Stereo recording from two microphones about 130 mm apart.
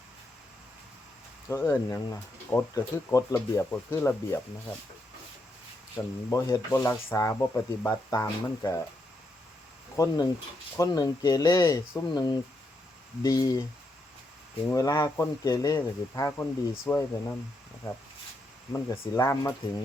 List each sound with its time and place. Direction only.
1.5 s speech: 20° left (ahead or behind)
6.0 s speech: 25° left (ahead or behind)
9.9 s speech: 25° left (ahead or behind)
14.7 s speech: 25° left (ahead or behind)
19.1 s speech: 25° left (ahead or behind)